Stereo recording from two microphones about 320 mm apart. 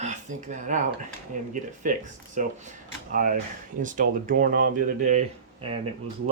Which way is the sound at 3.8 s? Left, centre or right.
Right.